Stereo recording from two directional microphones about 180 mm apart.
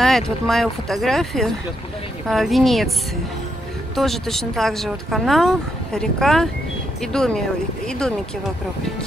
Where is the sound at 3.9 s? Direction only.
Centre (ahead or behind).